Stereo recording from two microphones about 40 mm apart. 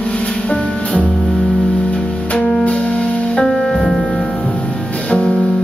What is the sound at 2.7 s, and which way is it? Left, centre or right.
Music, left.